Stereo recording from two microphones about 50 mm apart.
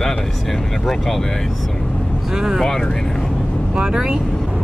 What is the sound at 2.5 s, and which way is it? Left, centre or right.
Speech, centre.